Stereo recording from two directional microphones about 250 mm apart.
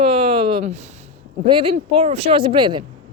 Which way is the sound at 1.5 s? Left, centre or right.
Centre.